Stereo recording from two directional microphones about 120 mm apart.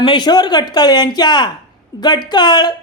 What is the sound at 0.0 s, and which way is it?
Speech, 40° left (ahead or behind).